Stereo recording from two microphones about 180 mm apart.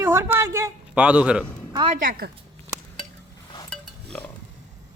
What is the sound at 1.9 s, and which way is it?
Speech, 45° right (ahead or behind).